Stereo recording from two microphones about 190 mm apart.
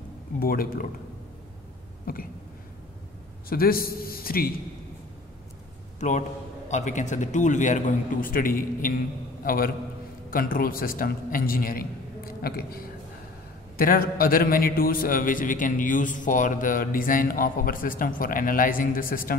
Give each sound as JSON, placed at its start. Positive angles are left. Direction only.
{"t": 0.4, "sound": "a man's voice", "side_deg": 50}
{"t": 2.1, "sound": "a man's voice", "side_deg": 50}
{"t": 3.4, "sound": "a man's voice", "side_deg": 50}
{"t": 5.9, "sound": "a man's voice", "side_deg": 40}